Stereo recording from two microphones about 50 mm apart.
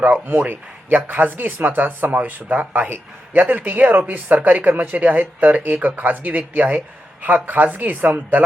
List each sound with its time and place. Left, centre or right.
0.0 s a man's voice: right